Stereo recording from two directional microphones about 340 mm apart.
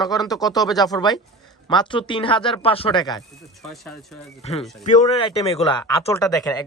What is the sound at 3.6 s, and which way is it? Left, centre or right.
Speech, centre.